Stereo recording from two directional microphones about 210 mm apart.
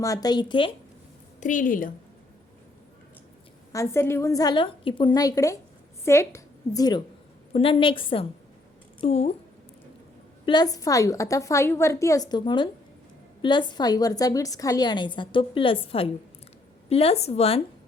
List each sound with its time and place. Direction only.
0.0 s a woman's voice: 15° left (ahead or behind)
1.4 s a woman's voice: 40° left (ahead or behind)
3.7 s a woman's voice: 15° left (ahead or behind); by 9.3 s 30° left (ahead or behind)
10.4 s a woman's voice: 20° left (ahead or behind)